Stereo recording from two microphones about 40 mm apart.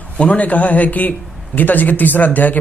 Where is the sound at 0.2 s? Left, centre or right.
Left.